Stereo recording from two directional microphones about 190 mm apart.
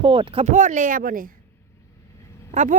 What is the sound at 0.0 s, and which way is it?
Speech, 30° right (ahead or behind).